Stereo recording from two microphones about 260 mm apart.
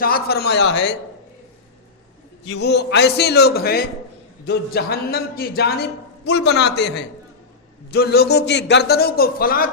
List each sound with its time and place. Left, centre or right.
0.0 s a man's voice: left
2.5 s a man's voice: left